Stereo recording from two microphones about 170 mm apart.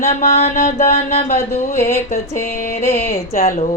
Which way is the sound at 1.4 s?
15° left (ahead or behind).